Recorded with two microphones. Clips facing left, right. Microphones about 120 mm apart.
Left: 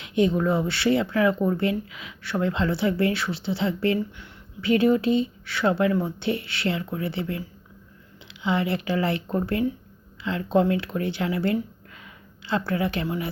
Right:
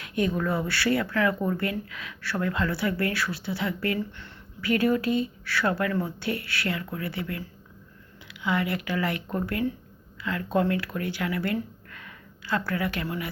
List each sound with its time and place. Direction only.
0.0 s speech: 20° left (ahead or behind)